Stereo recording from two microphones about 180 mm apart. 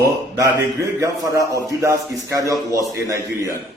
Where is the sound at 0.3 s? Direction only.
15° right (ahead or behind).